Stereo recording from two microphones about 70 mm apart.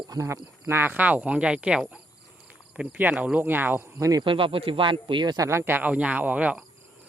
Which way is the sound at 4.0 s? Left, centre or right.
Right.